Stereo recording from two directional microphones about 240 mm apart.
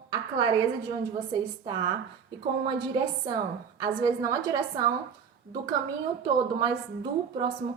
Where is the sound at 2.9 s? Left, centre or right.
Centre.